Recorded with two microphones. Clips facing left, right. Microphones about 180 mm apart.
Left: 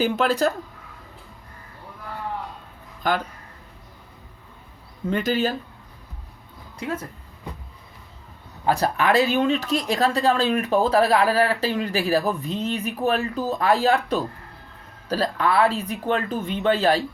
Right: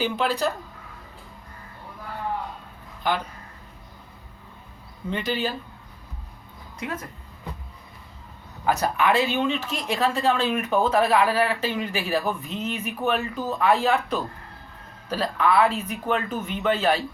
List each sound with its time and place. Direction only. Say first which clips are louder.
0.0 s speech: left 3 dB; 45° left (ahead or behind)
5.1 s speech: left 4 dB; 45° left (ahead or behind)
6.7 s a woman's voice: left 3 dB; 30° left (ahead or behind)
8.6 s speech: left 1 dB; 30° left (ahead or behind)